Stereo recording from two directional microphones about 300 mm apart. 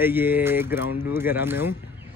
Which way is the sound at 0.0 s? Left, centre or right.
Centre.